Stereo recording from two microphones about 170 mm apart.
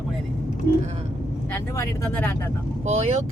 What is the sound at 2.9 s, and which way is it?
Speech, 40° right (ahead or behind).